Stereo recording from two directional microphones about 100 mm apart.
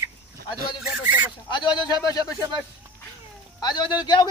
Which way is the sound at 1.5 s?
50° left (ahead or behind).